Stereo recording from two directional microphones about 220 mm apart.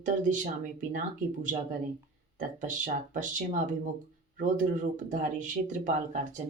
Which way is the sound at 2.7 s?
35° right (ahead or behind).